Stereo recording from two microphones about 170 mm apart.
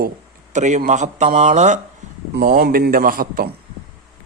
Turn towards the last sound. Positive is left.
turn(degrees=-55)  # may be behind; listen again after turning